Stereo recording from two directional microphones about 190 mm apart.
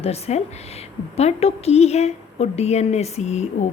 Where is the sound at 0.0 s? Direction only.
35° left (ahead or behind).